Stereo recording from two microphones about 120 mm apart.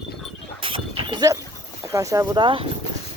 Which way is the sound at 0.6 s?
45° right (ahead or behind).